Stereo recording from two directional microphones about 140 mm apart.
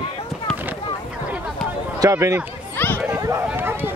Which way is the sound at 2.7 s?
15° left (ahead or behind).